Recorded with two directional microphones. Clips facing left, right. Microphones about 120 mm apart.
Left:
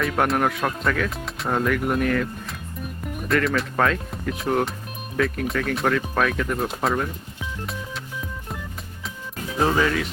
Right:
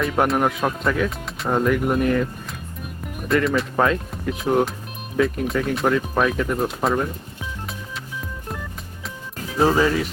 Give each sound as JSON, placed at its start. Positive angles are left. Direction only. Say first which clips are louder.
{"t": 0.0, "sound": "speech", "louder": "right 2 dB", "side_deg": 0}
{"t": 3.2, "sound": "speech", "louder": "right 2 dB", "side_deg": 0}
{"t": 9.7, "sound": "speech", "louder": "right 3 dB", "side_deg": -10}